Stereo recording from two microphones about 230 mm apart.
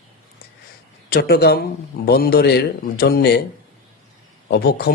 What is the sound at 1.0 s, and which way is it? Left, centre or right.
A man's voice, left.